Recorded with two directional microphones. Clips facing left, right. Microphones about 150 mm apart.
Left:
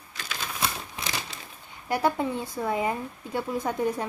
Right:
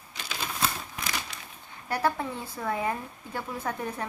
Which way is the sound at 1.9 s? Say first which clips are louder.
Left 3 dB; 15° left (ahead or behind).